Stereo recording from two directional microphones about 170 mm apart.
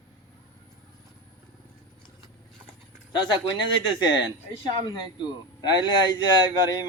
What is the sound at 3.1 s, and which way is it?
A man's voice, 25° left (ahead or behind).